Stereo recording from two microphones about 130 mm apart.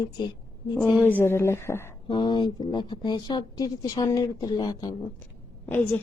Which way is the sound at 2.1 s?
40° left (ahead or behind).